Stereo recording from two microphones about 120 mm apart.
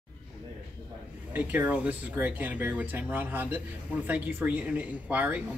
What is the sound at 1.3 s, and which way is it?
Speech, 15° right (ahead or behind).